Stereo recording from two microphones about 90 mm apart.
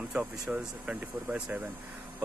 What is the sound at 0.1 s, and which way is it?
Speech, 10° right (ahead or behind).